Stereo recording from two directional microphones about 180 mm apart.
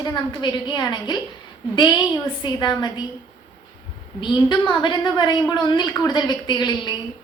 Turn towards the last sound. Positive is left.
turn(degrees=25)  # may be behind; listen again after turning